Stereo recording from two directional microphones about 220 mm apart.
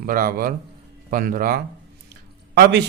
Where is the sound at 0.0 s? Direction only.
40° right (ahead or behind).